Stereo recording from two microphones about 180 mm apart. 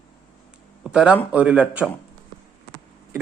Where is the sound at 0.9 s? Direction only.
5° right (ahead or behind).